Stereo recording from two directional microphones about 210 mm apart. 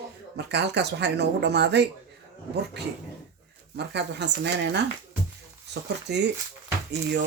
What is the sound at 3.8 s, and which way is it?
Speech, 55° right (ahead or behind).